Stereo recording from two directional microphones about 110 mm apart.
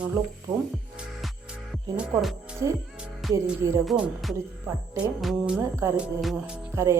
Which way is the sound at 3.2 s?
Centre (ahead or behind).